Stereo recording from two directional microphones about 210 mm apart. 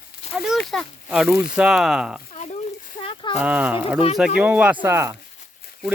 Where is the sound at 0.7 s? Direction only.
Centre (ahead or behind).